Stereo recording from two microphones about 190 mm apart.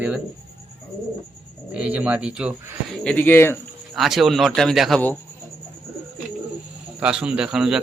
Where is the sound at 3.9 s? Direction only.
Centre (ahead or behind).